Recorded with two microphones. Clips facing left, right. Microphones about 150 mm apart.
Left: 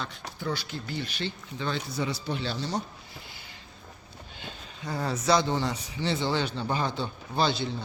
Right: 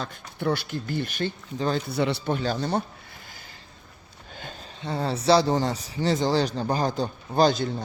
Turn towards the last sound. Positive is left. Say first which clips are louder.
# right 6 dB
turn(degrees=-45)  # may be behind; listen again after turning